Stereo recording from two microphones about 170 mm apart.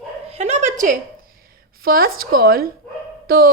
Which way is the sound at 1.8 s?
60° right (ahead or behind).